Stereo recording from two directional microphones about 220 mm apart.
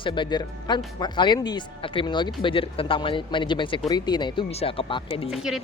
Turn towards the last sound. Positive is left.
turn(degrees=0)  # may be behind; listen again after turning